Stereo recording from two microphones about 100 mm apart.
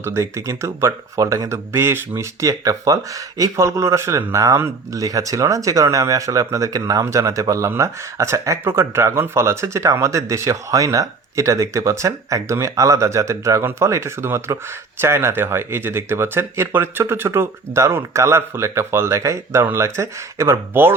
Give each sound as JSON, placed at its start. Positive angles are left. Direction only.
{"t": 0.0, "sound": "speech", "side_deg": -25}